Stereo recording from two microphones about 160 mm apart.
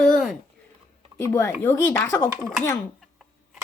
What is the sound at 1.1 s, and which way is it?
Speech, 15° left (ahead or behind).